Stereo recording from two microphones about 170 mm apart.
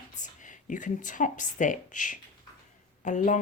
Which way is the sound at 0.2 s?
50° left (ahead or behind).